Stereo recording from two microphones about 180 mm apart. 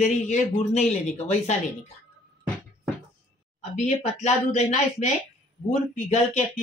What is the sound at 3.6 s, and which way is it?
Speech, 40° left (ahead or behind).